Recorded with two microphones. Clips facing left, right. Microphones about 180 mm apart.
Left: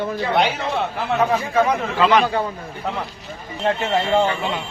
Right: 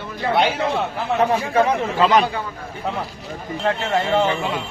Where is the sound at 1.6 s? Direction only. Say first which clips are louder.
Even; 40° right (ahead or behind).